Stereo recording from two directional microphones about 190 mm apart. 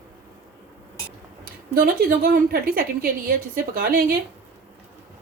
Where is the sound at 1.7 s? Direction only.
50° right (ahead or behind).